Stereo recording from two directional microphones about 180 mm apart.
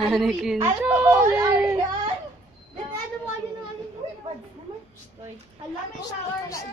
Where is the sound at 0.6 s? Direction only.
10° right (ahead or behind).